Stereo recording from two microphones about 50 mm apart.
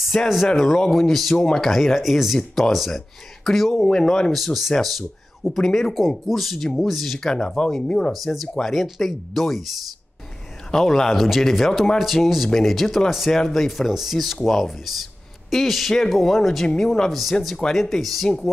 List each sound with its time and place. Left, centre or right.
0.0 s speech: centre
4.3 s speech: centre
8.1 s speech: centre
10.7 s speech: centre
17.1 s speech: centre